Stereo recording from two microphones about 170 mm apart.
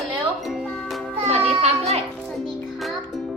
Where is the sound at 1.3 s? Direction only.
40° right (ahead or behind).